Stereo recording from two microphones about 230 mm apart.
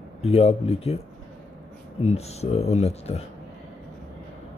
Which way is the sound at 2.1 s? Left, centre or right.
Left.